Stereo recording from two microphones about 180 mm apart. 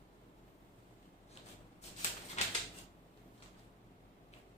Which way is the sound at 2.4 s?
40° left (ahead or behind).